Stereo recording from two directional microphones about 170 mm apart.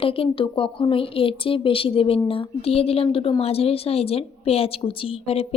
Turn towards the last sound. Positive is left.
turn(degrees=35)  # may be behind; listen again after turning